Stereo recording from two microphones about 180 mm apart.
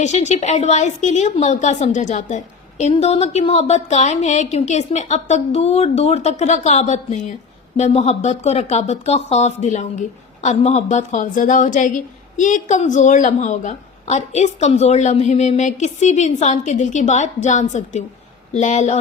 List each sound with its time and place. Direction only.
0.0 s speech: 40° left (ahead or behind)